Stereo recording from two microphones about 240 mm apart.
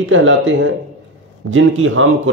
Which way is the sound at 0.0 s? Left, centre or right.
Right.